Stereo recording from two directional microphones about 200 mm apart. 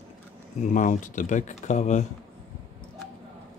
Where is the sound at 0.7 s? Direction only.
40° left (ahead or behind).